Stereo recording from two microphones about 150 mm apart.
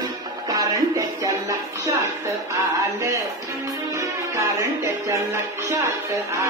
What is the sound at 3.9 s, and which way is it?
Music, 20° right (ahead or behind).